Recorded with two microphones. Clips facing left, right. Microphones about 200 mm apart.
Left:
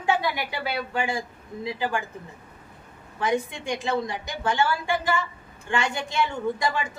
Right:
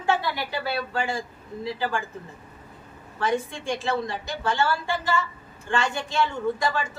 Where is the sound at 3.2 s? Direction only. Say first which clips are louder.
Even; 15° left (ahead or behind).